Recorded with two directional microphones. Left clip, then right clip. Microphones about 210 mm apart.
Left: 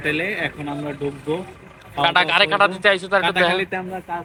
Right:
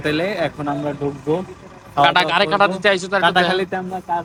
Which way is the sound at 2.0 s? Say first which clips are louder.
Right 2 dB; 15° right (ahead or behind).